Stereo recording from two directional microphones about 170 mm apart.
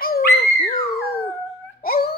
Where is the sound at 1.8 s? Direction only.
60° left (ahead or behind).